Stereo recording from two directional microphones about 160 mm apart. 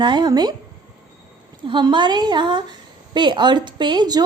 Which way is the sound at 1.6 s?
30° right (ahead or behind).